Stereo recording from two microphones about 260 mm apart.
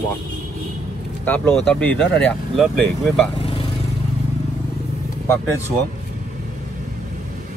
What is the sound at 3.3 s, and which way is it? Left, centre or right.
Vehicle, left.